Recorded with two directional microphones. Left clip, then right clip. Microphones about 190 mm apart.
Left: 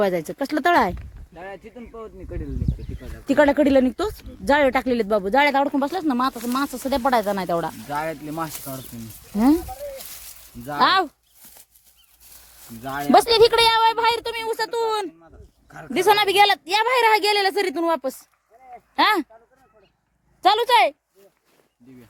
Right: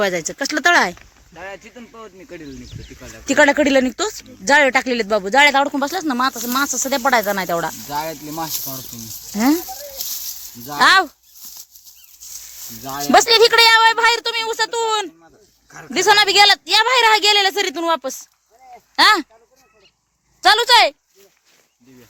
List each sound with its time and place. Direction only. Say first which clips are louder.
0.0 s speech: right 2 dB; 10° left (ahead or behind)
0.9 s speech: right 3 dB; 20° right (ahead or behind)
3.2 s speech: right 3 dB; centre (ahead or behind)
7.9 s speech: right 2 dB; centre (ahead or behind)
9.3 s speech: right 1 dB; 10° right (ahead or behind)
10.7 s speech: right 5 dB; 5° right (ahead or behind)
12.8 s speech: right 3 dB; centre (ahead or behind)
18.7 s a sound: right 6 dB; 5° left (ahead or behind)
20.4 s speech: right 4 dB; centre (ahead or behind)